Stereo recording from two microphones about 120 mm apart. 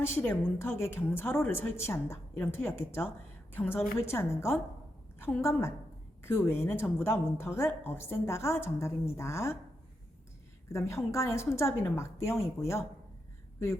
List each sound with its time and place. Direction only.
0.0 s a woman's voice: 20° left (ahead or behind)
10.7 s a woman's voice: 25° left (ahead or behind)